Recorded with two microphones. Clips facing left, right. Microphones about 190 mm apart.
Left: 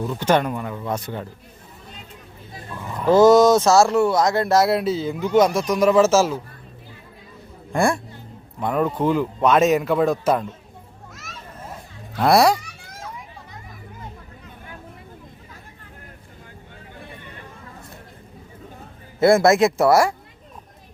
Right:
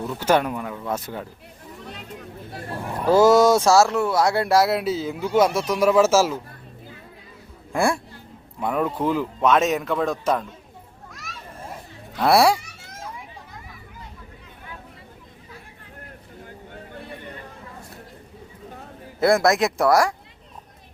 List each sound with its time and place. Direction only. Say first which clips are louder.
0.0 s speech: left 1 dB; 5° right (ahead or behind)
1.9 s a sound: right 6 dB; 65° right (ahead or behind)
3.0 s speech: left 2 dB; 10° right (ahead or behind)
7.7 s speech: left 2 dB; 5° right (ahead or behind)
12.2 s speech: left 1 dB; 5° right (ahead or behind)
19.2 s speech: left 4 dB; centre (ahead or behind)